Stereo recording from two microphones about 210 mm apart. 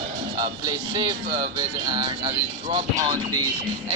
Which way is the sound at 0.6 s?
20° right (ahead or behind).